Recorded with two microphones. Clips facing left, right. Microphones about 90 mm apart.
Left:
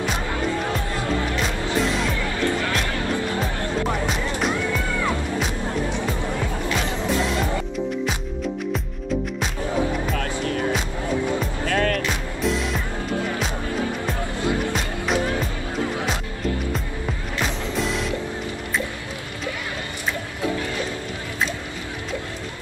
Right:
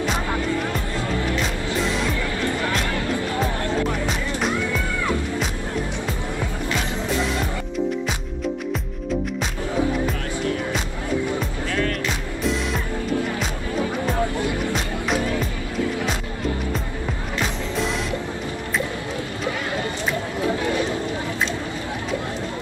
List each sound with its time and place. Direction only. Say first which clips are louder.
1.8 s music: left 1 dB; centre (ahead or behind)
11.6 s music: left 4 dB; 55° left (ahead or behind)
17.7 s music: right 1 dB; centre (ahead or behind)